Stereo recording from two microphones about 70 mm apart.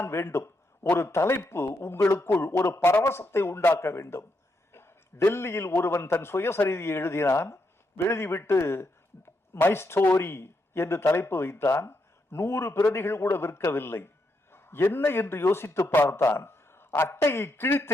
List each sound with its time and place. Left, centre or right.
0.0 s a man's voice: left